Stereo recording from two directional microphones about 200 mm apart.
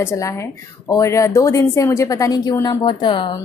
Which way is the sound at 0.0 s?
15° left (ahead or behind).